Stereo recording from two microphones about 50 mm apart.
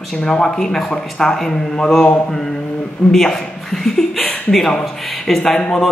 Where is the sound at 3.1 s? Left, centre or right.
Centre.